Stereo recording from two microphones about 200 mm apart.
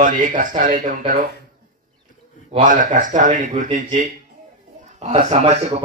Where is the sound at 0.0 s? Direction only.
40° right (ahead or behind).